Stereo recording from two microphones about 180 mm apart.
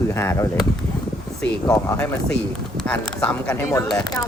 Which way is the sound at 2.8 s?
5° left (ahead or behind).